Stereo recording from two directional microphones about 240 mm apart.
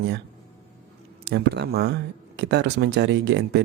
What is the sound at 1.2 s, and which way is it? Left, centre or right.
Speech, right.